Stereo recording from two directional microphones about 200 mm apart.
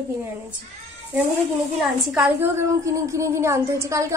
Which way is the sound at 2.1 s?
10° right (ahead or behind).